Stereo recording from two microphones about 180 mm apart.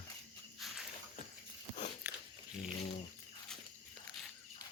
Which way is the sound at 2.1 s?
15° right (ahead or behind).